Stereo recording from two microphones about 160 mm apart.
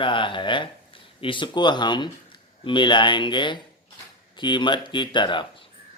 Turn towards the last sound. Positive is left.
turn(degrees=30)  # may be behind; listen again after turning